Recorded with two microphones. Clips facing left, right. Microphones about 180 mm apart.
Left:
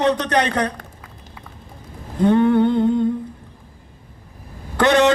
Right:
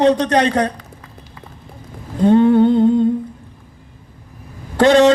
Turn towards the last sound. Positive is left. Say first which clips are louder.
# right 5 dB
turn(degrees=-25)  # may be behind; listen again after turning